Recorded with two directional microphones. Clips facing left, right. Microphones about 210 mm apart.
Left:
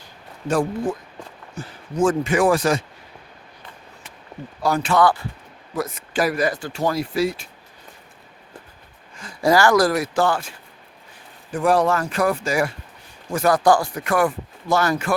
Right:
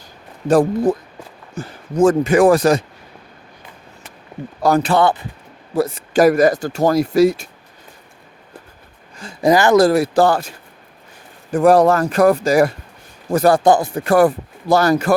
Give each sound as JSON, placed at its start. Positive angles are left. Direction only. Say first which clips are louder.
{"t": 0.4, "sound": "speech", "louder": "right 7 dB", "side_deg": -35}
{"t": 4.6, "sound": "speech", "louder": "right 4 dB", "side_deg": -40}
{"t": 6.2, "sound": "speech", "louder": "right 10 dB", "side_deg": -45}
{"t": 9.4, "sound": "speech", "louder": "right 4 dB", "side_deg": -20}
{"t": 11.5, "sound": "speech", "louder": "right 7 dB", "side_deg": -40}